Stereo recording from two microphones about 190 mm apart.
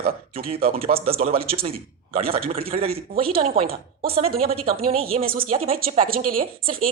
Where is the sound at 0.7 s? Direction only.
30° right (ahead or behind).